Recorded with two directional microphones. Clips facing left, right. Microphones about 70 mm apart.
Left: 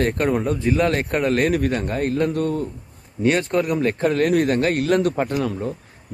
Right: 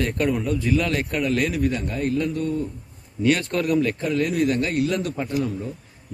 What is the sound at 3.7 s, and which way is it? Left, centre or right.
Speech, left.